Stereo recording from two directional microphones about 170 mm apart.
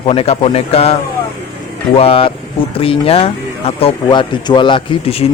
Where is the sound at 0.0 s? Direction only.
35° left (ahead or behind).